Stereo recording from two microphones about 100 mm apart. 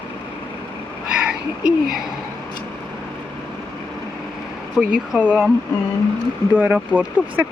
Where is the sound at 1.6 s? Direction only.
5° right (ahead or behind).